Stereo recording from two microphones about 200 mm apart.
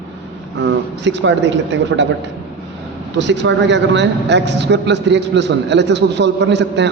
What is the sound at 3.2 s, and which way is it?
A man's voice, 60° right (ahead or behind).